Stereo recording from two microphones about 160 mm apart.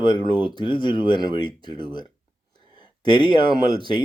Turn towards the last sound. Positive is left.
turn(degrees=30)  # may be behind; listen again after turning